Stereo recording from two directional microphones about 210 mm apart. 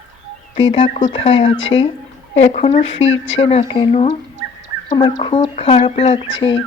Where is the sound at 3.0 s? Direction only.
65° left (ahead or behind).